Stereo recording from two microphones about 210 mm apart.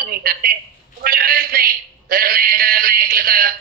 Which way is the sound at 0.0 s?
45° right (ahead or behind).